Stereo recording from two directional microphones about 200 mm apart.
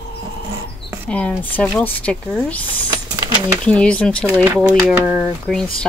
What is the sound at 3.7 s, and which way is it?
Speech, 5° left (ahead or behind).